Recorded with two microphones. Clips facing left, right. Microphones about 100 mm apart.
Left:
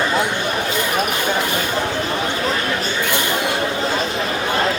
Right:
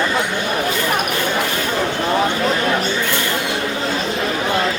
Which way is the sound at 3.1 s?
20° left (ahead or behind).